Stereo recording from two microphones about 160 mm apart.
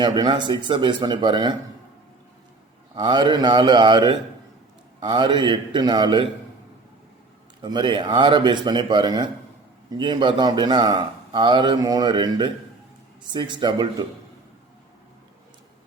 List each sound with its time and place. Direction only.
0.0 s speech: 30° right (ahead or behind)
2.9 s speech: 30° right (ahead or behind)
7.6 s speech: 30° right (ahead or behind)